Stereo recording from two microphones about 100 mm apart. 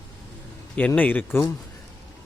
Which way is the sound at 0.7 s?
15° left (ahead or behind).